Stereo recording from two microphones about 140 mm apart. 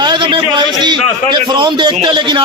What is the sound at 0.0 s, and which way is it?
A man's voice, 35° right (ahead or behind).